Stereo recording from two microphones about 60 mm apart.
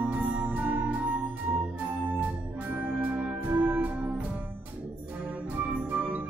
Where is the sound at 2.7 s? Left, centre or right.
Right.